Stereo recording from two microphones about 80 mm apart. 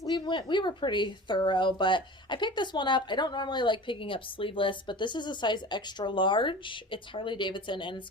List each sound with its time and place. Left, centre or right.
0.0 s a woman's voice: left